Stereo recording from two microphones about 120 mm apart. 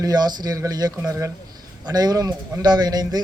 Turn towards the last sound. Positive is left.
turn(degrees=-35)  # may be behind; listen again after turning